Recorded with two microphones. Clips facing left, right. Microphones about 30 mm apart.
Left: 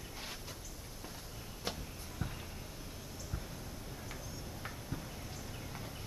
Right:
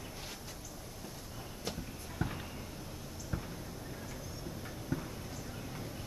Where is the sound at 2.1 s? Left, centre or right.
Centre.